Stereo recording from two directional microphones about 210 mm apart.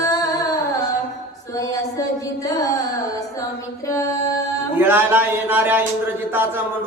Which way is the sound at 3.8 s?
15° left (ahead or behind).